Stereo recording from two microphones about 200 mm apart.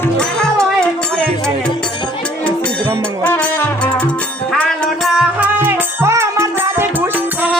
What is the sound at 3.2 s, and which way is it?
Music, 5° left (ahead or behind).